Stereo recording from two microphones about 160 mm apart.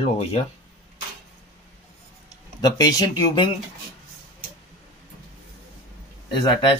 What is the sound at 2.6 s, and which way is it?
Speech, 25° left (ahead or behind).